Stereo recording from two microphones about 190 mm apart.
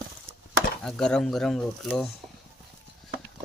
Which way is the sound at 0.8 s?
5° left (ahead or behind).